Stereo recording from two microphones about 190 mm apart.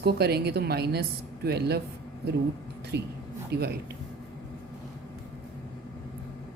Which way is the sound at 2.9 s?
60° right (ahead or behind).